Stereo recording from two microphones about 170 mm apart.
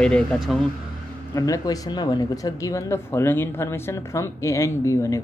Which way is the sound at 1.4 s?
20° left (ahead or behind).